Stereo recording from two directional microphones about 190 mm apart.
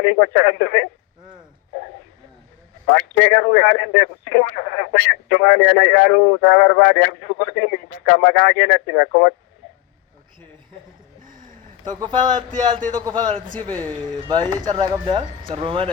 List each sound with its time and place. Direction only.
0.0 s speech: 60° left (ahead or behind)
2.9 s speech: 60° left (ahead or behind)
11.2 s a sound: 45° right (ahead or behind)
11.9 s speech: 25° right (ahead or behind)
13.6 s speech: 10° left (ahead or behind)
14.3 s speech: 20° right (ahead or behind)